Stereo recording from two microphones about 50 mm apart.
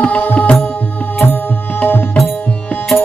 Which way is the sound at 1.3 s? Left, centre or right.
Left.